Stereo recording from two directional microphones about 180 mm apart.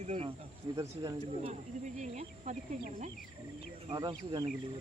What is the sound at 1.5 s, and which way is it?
Speech, 40° right (ahead or behind).